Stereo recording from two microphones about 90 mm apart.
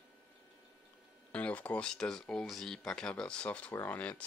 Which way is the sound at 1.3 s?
15° left (ahead or behind).